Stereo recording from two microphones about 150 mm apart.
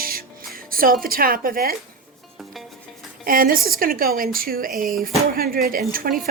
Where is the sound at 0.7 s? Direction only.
75° right (ahead or behind).